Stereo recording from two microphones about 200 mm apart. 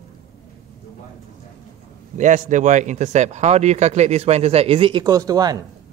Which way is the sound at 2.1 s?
40° right (ahead or behind).